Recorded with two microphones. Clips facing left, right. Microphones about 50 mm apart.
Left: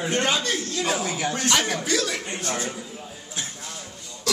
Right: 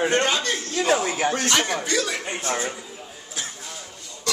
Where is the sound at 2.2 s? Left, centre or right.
Right.